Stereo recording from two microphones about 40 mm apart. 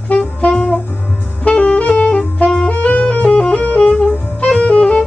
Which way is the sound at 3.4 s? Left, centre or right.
Left.